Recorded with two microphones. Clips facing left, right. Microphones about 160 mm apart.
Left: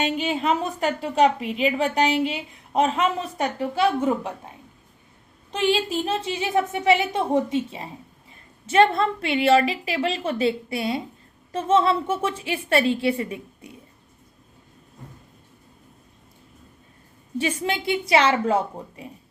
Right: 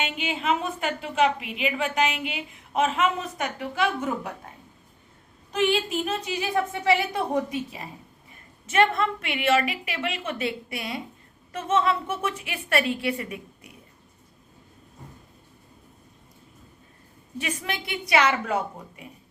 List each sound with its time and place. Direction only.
0.0 s a woman's voice: 35° left (ahead or behind)
5.5 s a woman's voice: 30° left (ahead or behind)
17.3 s a woman's voice: 30° left (ahead or behind)